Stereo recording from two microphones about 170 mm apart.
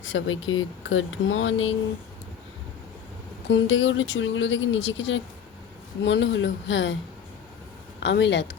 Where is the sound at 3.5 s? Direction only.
90° left.